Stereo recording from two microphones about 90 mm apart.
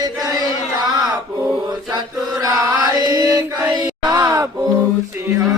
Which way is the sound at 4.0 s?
45° right (ahead or behind).